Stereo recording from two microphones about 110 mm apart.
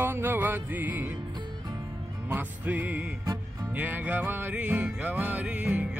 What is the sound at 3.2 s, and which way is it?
Music, 35° right (ahead or behind).